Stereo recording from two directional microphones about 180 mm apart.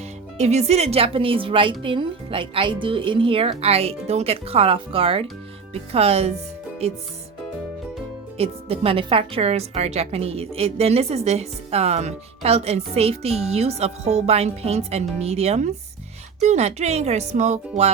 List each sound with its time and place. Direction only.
0.3 s a woman's voice: 40° right (ahead or behind)
8.4 s a woman's voice: 35° right (ahead or behind)